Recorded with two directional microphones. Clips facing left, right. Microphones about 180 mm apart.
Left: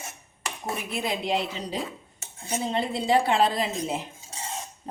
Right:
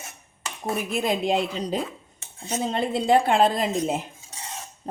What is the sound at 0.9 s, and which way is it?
Speech, 45° right (ahead or behind).